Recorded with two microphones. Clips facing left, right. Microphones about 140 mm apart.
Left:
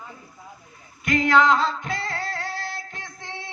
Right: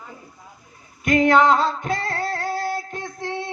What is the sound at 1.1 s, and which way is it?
Music, 45° right (ahead or behind).